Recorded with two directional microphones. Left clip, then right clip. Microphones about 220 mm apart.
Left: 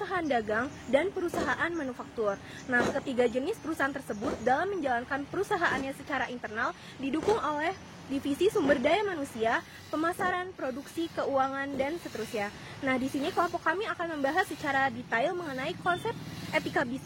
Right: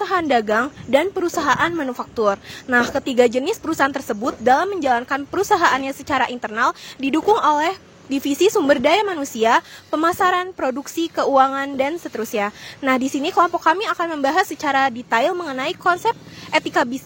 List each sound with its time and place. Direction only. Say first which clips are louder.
0.0 s a woman's voice: right 12 dB; 50° right (ahead or behind)